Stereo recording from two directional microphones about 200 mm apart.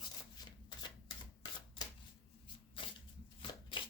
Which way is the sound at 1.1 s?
20° left (ahead or behind).